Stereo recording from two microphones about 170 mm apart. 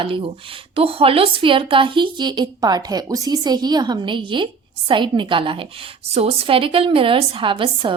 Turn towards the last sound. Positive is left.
turn(degrees=-30)  # may be behind; listen again after turning